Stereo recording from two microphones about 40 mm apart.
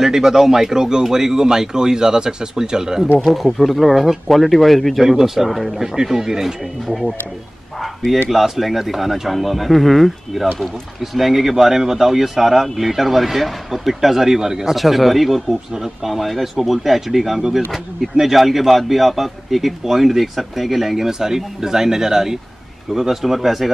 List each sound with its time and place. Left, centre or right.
0.0 s speech: centre
3.3 s speech: centre
5.0 s speech: centre
5.5 s speech: centre
5.9 s speech: centre
6.9 s speech: centre
7.8 s bow-wow: centre
8.3 s speech: centre